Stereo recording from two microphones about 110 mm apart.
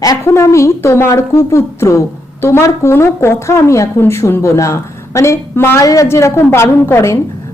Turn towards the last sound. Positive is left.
turn(degrees=25)  # may be behind; listen again after turning